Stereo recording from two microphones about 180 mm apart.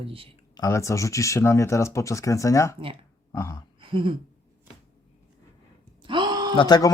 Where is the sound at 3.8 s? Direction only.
30° right (ahead or behind).